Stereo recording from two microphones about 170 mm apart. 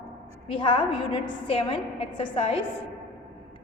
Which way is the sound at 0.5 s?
30° left (ahead or behind).